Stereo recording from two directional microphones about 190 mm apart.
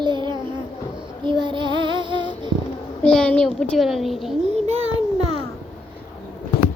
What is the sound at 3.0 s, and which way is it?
A child's voice, 5° left (ahead or behind).